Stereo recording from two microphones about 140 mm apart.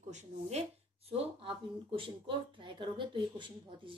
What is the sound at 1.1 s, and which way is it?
A woman's voice, 40° right (ahead or behind).